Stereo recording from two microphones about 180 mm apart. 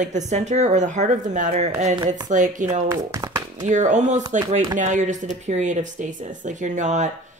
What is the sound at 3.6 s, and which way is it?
Speech, 45° right (ahead or behind).